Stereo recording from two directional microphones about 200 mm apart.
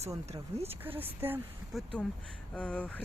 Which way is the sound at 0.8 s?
10° right (ahead or behind).